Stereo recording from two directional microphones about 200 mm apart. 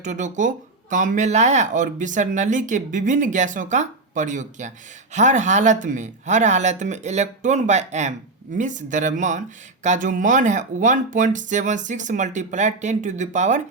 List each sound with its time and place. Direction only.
0.0 s speech: 40° right (ahead or behind)